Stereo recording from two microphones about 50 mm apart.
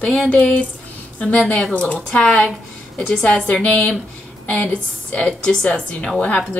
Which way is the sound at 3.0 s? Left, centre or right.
Left.